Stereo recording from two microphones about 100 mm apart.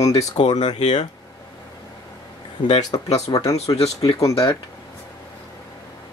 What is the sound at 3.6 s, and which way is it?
Speech, 90° left.